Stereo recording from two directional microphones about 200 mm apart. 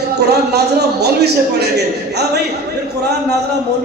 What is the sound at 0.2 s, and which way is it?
A man's voice, 55° right (ahead or behind).